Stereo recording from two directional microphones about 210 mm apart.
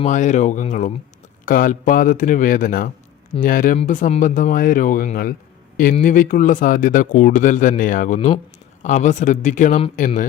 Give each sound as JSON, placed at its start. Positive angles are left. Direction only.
{"t": 0.0, "sound": "a man's voice", "side_deg": 35}